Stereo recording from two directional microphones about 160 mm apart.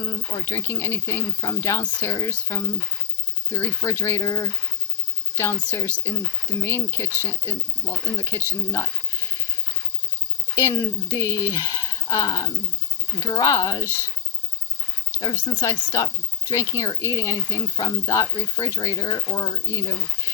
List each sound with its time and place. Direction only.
0.0 s speech: 20° left (ahead or behind)
10.5 s speech: 15° left (ahead or behind)
15.4 s speech: 20° left (ahead or behind)